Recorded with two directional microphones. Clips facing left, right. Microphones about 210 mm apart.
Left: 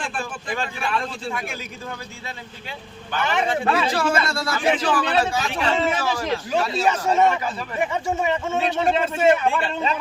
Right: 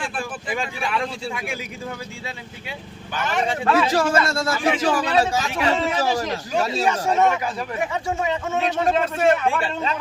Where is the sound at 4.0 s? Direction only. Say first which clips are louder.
Right 2 dB; 45° right (ahead or behind).